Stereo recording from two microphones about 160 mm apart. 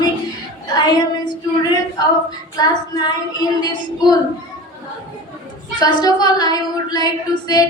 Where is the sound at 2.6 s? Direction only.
25° left (ahead or behind).